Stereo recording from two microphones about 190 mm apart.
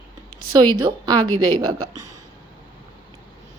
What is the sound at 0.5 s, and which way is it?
A woman's voice, 20° right (ahead or behind).